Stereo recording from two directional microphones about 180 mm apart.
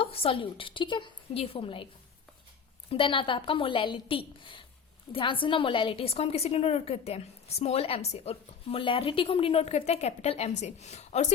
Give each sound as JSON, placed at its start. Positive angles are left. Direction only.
{"t": 0.0, "sound": "a woman's voice", "side_deg": 30}
{"t": 2.9, "sound": "a woman's voice", "side_deg": 30}